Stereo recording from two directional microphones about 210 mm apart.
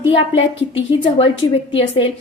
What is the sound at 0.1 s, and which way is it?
Speech, 25° left (ahead or behind).